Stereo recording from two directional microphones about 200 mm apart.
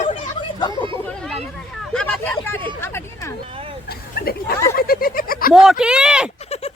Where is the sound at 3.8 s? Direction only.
50° left (ahead or behind).